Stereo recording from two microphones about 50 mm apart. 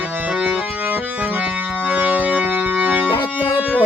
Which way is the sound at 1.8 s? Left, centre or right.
Right.